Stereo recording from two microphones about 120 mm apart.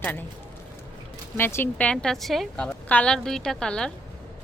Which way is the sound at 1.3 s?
20° left (ahead or behind).